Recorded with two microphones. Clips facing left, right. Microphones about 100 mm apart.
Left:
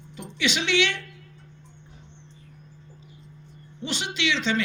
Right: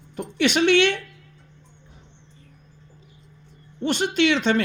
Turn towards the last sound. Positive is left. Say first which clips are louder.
# right 6 dB
turn(degrees=-50)  # may be behind; listen again after turning